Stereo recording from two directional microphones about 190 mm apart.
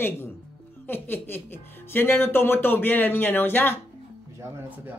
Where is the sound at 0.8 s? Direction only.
10° left (ahead or behind).